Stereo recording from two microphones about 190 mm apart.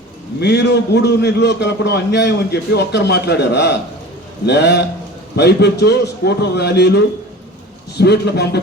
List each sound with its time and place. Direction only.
0.3 s a man's voice: 60° left (ahead or behind)